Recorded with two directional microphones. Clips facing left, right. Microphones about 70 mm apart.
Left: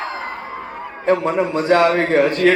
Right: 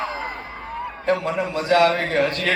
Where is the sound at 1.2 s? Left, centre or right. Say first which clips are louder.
Left 5 dB; left.